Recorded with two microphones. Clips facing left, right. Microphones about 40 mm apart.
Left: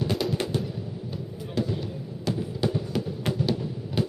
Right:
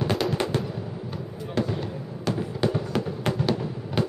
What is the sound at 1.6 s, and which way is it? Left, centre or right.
Fireworks, right.